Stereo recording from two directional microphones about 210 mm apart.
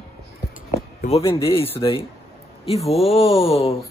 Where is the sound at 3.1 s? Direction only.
30° left (ahead or behind).